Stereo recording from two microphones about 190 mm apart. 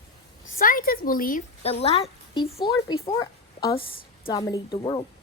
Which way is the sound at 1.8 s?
30° left (ahead or behind).